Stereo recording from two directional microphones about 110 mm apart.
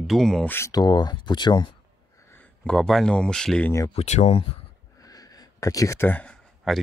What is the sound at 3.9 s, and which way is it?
Speech, 85° left.